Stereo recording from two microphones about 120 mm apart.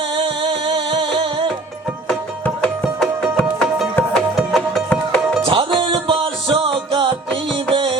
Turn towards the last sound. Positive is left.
turn(degrees=-50)  # may be behind; listen again after turning